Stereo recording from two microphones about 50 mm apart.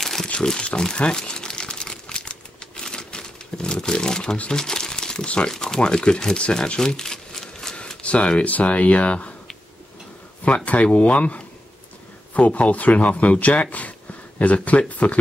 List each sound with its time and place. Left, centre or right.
0.0 s crumpling: centre
0.3 s crumpling: centre
4.5 s speech: centre
7.8 s speech: left
10.4 s speech: left